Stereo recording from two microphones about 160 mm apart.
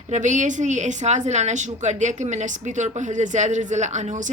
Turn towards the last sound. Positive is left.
turn(degrees=-50)  # may be behind; listen again after turning